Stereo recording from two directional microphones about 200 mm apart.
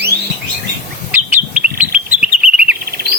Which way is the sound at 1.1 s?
10° right (ahead or behind).